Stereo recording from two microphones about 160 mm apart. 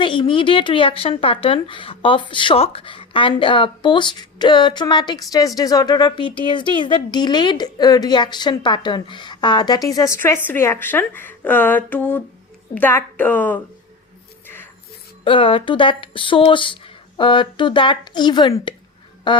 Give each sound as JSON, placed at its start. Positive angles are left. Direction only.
{"t": 0.0, "sound": "a woman's voice", "side_deg": 30}
{"t": 14.4, "sound": "music", "side_deg": 15}
{"t": 15.2, "sound": "a woman's voice", "side_deg": 35}